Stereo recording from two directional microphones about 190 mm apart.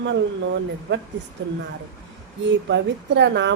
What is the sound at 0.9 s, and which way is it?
Speech, 70° right (ahead or behind).